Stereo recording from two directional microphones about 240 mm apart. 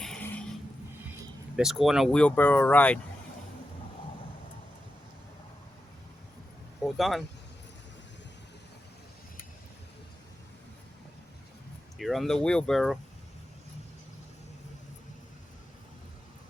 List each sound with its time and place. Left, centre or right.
0.0 s a sound: centre
1.5 s speech: centre
6.8 s speech: centre
11.9 s speech: centre